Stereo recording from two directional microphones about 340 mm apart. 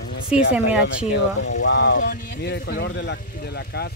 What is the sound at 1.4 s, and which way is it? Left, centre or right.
Speech, left.